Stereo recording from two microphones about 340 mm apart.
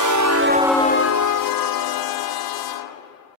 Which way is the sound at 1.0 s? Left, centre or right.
Left.